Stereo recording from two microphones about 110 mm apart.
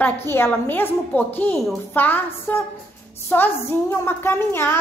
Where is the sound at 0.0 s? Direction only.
20° left (ahead or behind).